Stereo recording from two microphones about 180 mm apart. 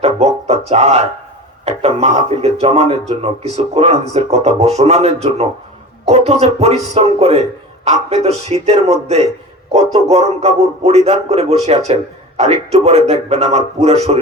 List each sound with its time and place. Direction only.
0.0 s speech: 35° right (ahead or behind)